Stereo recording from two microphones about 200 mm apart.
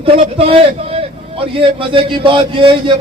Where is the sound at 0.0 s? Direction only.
25° right (ahead or behind).